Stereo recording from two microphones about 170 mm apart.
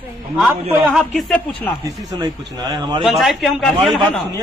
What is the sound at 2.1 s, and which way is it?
Speech, 25° right (ahead or behind).